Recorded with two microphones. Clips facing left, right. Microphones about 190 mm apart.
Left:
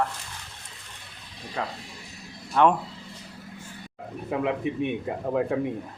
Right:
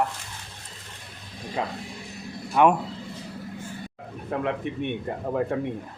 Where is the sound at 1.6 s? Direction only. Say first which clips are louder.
Right 2 dB; 20° right (ahead or behind).